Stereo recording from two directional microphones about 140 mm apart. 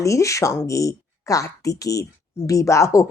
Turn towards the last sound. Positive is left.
turn(degrees=20)  # may be behind; listen again after turning